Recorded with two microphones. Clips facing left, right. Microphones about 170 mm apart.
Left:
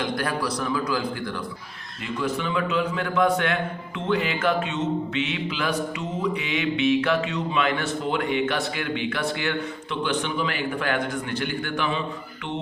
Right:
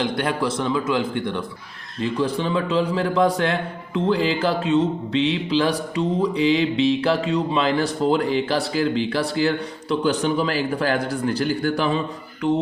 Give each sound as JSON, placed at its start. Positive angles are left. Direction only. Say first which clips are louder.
{"t": 0.0, "sound": "a man's voice", "louder": "right 4 dB", "side_deg": -25}